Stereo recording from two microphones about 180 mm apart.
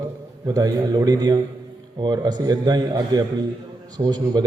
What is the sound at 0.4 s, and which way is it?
A man's voice, 20° right (ahead or behind).